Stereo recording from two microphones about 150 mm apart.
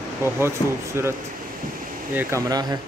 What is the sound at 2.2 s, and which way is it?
Speech, 20° right (ahead or behind).